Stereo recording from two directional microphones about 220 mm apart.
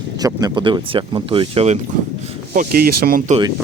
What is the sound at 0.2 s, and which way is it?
Speech, 15° right (ahead or behind).